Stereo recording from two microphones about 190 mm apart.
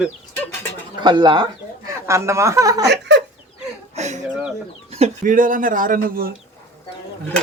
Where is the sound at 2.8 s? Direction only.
60° right (ahead or behind).